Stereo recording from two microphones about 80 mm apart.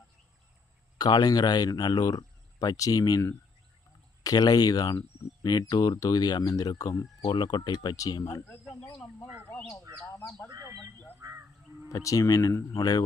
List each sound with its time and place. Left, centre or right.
0.9 s speech: left
4.2 s speech: left
7.2 s speech: left
11.2 s a sound: right
11.9 s speech: left